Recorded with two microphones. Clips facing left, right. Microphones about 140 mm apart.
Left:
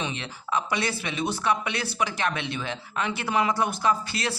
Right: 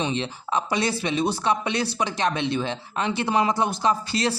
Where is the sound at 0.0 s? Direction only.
30° right (ahead or behind).